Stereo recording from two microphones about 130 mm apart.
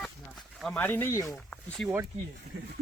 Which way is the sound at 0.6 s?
10° left (ahead or behind).